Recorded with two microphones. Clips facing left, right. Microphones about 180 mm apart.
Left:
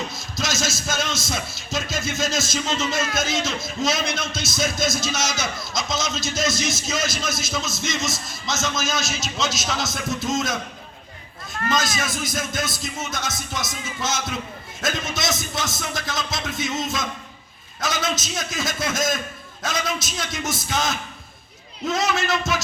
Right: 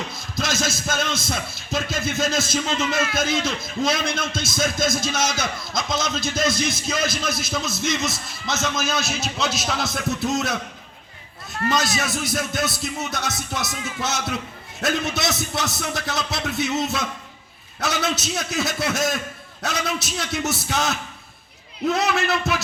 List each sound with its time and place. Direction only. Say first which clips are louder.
0.3 s music: right 2 dB; 55° right (ahead or behind)
1.9 s a man's voice: right 2 dB; 55° right (ahead or behind)
11.7 s a man's voice: right 1 dB; 65° right (ahead or behind)